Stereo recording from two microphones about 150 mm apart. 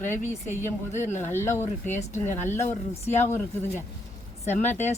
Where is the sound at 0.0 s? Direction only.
55° left (ahead or behind).